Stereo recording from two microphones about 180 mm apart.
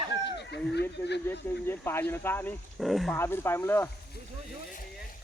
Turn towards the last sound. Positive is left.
turn(degrees=10)  # may be behind; listen again after turning